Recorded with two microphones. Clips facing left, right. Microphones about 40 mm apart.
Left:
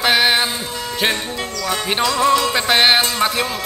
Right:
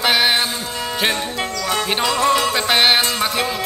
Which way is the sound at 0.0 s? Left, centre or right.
Centre.